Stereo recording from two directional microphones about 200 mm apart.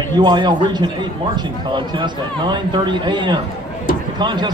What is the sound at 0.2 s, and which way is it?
A man's voice, 25° right (ahead or behind).